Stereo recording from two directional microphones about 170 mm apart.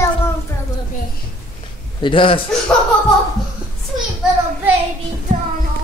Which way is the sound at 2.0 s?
30° left (ahead or behind).